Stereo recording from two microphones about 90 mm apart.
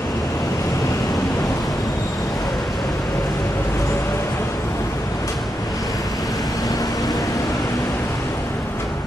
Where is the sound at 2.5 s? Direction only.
Centre (ahead or behind).